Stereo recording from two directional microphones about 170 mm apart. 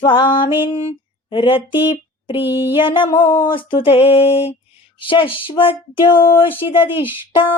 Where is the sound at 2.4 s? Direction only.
15° right (ahead or behind).